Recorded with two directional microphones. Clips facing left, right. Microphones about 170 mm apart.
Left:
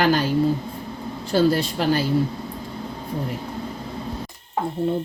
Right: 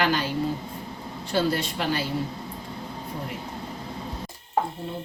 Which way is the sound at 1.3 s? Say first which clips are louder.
Left 6 dB; 40° left (ahead or behind).